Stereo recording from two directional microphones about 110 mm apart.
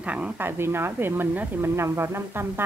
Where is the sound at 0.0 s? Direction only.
15° right (ahead or behind).